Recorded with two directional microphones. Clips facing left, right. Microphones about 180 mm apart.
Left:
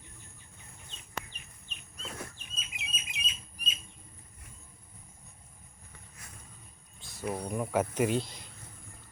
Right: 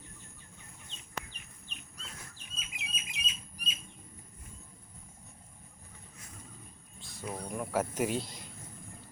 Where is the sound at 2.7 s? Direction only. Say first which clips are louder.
Left 1 dB; 25° left (ahead or behind).